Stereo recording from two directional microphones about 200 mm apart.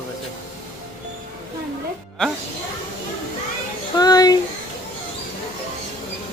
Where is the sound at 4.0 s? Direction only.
20° left (ahead or behind).